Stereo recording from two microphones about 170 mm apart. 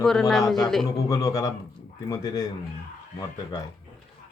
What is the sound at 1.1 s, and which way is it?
Speech, 20° left (ahead or behind).